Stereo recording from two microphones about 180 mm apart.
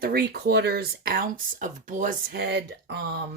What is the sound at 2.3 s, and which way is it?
Speech, 65° right (ahead or behind).